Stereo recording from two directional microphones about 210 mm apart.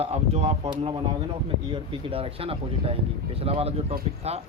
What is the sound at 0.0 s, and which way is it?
Speech, 30° right (ahead or behind).